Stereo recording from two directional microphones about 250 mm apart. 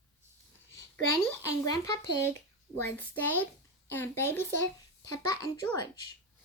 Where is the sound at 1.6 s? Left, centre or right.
Centre.